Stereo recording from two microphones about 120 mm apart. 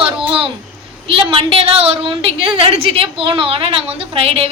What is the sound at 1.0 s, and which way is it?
A woman's voice, 50° right (ahead or behind).